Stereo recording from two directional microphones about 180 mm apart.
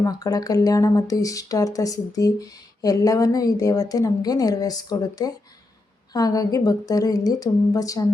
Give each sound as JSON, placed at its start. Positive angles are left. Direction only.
{"t": 0.0, "sound": "speech", "side_deg": 20}